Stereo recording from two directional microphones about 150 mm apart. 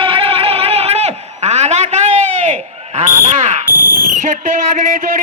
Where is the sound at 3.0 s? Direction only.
50° right (ahead or behind).